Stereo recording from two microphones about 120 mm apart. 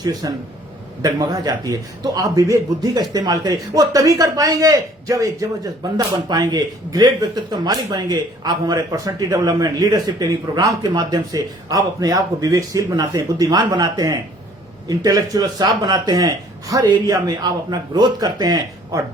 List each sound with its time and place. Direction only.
0.0 s speech: 35° right (ahead or behind)